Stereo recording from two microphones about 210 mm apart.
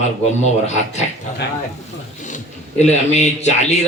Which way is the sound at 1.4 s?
50° left (ahead or behind).